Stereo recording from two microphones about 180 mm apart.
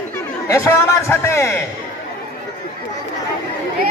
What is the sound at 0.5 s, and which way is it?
A man's voice, 15° left (ahead or behind).